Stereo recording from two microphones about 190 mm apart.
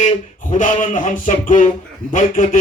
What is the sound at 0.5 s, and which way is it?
A man's voice, 40° left (ahead or behind).